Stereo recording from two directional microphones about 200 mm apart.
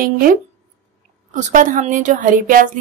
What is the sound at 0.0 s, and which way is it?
A woman's voice, 45° right (ahead or behind).